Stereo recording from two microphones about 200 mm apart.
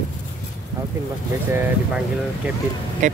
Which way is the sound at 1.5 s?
10° right (ahead or behind).